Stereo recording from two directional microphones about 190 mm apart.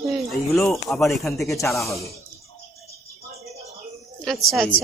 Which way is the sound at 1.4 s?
15° left (ahead or behind).